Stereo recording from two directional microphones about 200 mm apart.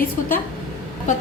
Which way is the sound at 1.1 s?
40° left (ahead or behind).